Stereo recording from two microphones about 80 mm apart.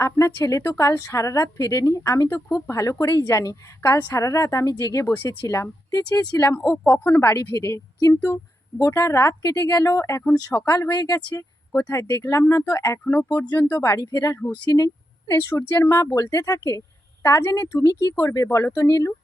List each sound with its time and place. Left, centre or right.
0.0 s a woman's voice: left
6.9 s a woman's voice: left
7.2 s a woman's voice: left
9.4 s speech: left
10.8 s a woman's voice: left
13.1 s a woman's voice: left
13.9 s speech: left
15.3 s a woman's voice: left